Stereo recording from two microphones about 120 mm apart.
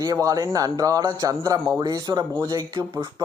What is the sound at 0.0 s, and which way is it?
Speech, 30° right (ahead or behind).